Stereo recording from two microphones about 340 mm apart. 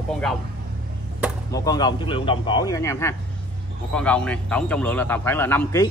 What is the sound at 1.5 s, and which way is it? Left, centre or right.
A man's voice, centre.